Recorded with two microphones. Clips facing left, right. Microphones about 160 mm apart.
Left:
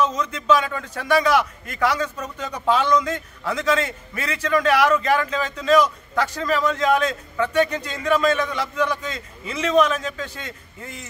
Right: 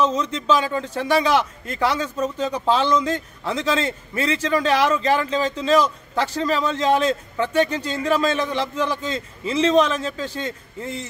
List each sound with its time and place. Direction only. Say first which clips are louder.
0.0 s a man's voice: right 2 dB; 30° right (ahead or behind)